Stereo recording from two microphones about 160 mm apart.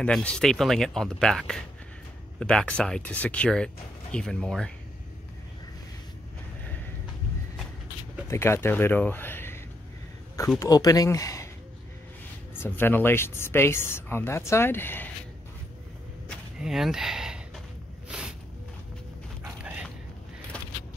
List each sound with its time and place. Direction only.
0.0 s speech: 5° left (ahead or behind)
8.3 s speech: 15° left (ahead or behind)
10.6 s speech: 25° left (ahead or behind)
12.5 s speech: 15° left (ahead or behind)
16.5 s speech: 5° right (ahead or behind)
18.0 s a sound: 5° right (ahead or behind)
19.4 s dog: 5° right (ahead or behind)